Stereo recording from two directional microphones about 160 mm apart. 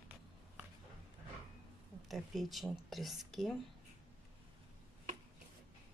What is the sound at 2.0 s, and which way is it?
Speech, centre (ahead or behind).